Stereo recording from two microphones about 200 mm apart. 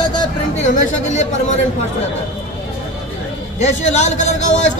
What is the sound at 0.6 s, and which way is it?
Speech, 40° left (ahead or behind).